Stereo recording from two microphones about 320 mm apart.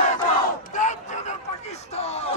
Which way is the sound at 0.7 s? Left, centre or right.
Left.